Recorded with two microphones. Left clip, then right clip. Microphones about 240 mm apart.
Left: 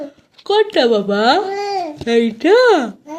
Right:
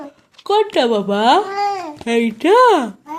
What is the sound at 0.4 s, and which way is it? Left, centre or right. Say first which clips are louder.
Speech: left 1 dB; right.